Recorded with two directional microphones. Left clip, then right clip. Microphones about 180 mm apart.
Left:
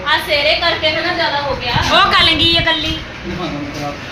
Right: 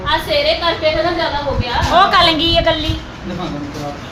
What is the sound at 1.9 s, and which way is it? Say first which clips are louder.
Speech: right 1 dB; 65° right (ahead or behind).